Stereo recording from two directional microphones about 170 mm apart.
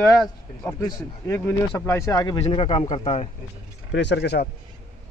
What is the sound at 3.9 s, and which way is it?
Speech, 90° left.